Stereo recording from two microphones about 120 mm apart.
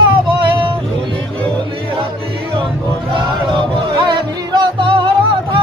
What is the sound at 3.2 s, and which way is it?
Music, 45° right (ahead or behind).